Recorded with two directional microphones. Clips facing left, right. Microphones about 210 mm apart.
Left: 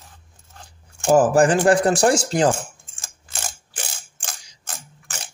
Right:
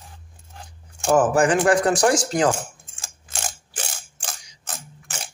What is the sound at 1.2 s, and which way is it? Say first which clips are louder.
Speech: left 2 dB; 30° left (ahead or behind).